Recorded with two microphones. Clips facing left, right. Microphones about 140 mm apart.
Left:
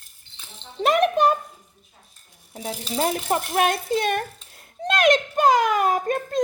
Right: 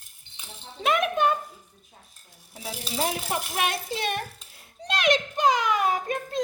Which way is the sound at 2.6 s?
45° left (ahead or behind).